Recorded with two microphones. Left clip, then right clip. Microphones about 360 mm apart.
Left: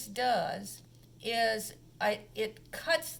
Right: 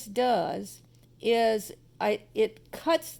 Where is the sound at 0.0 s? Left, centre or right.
Centre.